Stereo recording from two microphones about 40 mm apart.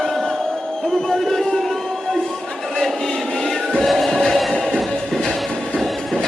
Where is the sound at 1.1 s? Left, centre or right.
Centre.